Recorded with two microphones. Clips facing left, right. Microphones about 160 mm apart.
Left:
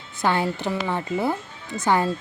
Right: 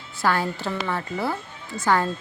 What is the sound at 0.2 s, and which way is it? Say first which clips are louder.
Speech: left 1 dB; 20° left (ahead or behind).